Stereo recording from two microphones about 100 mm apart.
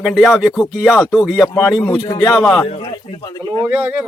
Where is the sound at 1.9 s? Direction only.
40° left (ahead or behind).